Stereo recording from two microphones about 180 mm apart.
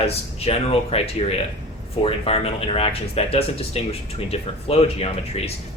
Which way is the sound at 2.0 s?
30° left (ahead or behind).